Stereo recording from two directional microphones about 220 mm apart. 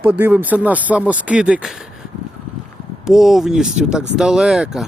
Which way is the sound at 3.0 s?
Centre (ahead or behind).